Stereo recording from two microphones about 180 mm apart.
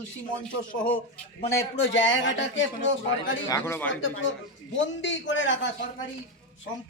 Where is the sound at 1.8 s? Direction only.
90° left.